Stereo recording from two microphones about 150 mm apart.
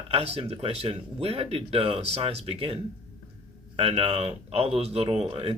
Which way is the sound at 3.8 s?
40° right (ahead or behind).